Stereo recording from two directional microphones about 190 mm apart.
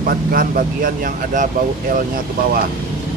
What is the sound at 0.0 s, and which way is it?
Speech, 50° right (ahead or behind).